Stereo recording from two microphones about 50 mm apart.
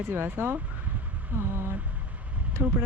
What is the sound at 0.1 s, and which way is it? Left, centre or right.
Speech, right.